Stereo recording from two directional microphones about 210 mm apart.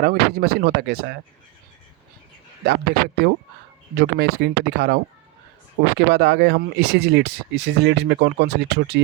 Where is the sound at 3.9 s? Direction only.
50° right (ahead or behind).